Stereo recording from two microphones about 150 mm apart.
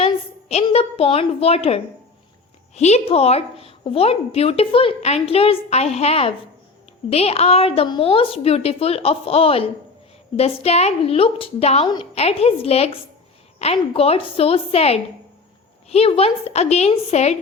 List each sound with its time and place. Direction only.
0.0 s a woman's voice: 45° left (ahead or behind)